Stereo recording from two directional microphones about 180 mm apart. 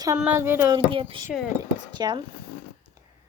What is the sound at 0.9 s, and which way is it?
Speech, 30° right (ahead or behind).